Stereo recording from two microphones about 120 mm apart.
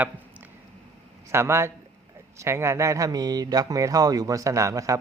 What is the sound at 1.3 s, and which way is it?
A man's voice, 20° right (ahead or behind).